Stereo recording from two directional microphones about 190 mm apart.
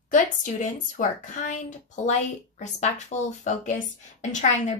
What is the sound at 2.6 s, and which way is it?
Speech, 40° left (ahead or behind).